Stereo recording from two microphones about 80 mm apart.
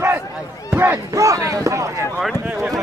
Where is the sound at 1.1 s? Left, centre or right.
Right.